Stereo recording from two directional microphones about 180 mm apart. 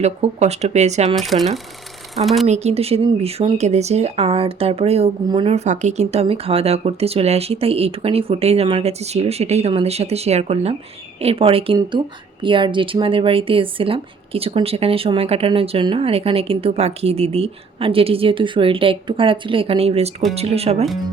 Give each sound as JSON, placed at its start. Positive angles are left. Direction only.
{"t": 0.0, "sound": "speech", "side_deg": -35}
{"t": 1.1, "sound": "speech", "side_deg": 0}
{"t": 2.5, "sound": "speech", "side_deg": -35}